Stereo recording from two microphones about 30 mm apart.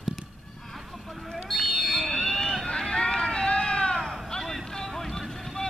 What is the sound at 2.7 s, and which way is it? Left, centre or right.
Run, left.